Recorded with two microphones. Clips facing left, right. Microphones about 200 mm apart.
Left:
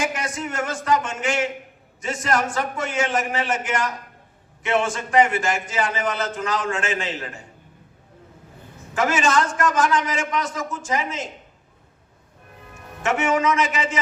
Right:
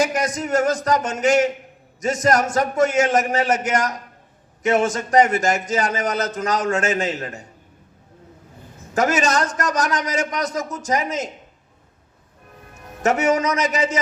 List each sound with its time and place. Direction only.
0.0 s a man's voice: 40° right (ahead or behind)
9.0 s a man's voice: 40° right (ahead or behind)
13.0 s a man's voice: 40° right (ahead or behind)